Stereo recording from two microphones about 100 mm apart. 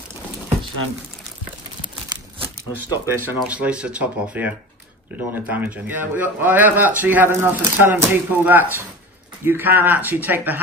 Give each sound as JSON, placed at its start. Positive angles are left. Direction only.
{"t": 2.4, "sound": "speech", "side_deg": -20}